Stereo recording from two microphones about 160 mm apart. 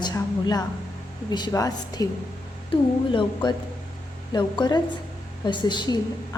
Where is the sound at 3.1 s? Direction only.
30° left (ahead or behind).